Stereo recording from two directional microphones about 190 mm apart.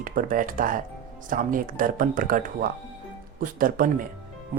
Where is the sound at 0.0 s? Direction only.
45° right (ahead or behind).